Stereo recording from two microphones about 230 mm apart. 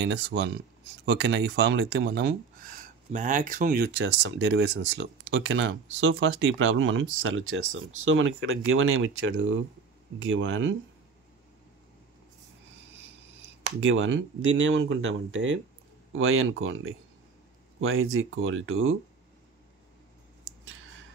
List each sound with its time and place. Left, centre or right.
0.0 s speech: right
13.7 s speech: right